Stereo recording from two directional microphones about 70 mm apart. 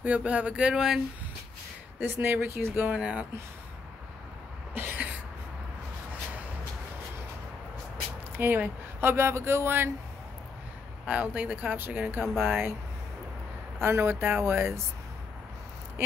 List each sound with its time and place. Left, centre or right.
0.0 s a sound: centre
2.0 s speech: right
3.0 s a sound: centre
4.7 s cough: right
8.4 s speech: right
11.1 s speech: centre
13.7 s speech: right